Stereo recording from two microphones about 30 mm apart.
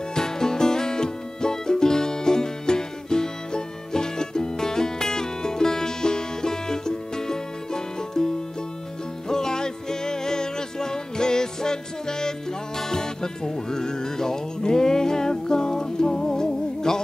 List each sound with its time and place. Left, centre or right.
0.1 s music: left
9.3 s music: left